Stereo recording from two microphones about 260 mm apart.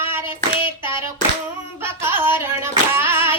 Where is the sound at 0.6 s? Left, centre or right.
Centre.